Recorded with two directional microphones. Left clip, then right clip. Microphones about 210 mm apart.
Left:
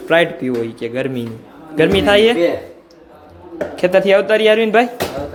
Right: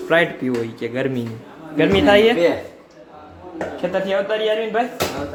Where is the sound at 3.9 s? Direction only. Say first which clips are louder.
Left 9 dB; 35° left (ahead or behind).